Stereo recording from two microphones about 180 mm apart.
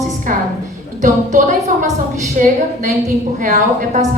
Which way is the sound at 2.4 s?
45° right (ahead or behind).